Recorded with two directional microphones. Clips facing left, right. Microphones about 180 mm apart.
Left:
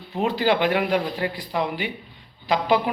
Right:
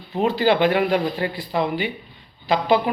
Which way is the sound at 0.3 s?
5° left (ahead or behind).